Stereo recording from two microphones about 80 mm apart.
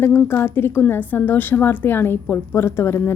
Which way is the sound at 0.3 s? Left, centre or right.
Left.